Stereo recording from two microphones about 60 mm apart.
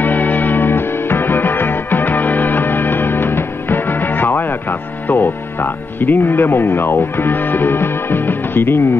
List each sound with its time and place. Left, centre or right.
0.0 s music: left